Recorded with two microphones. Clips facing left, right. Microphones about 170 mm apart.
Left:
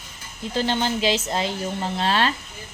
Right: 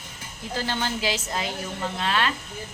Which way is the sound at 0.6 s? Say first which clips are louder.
Left 5 dB; 20° left (ahead or behind).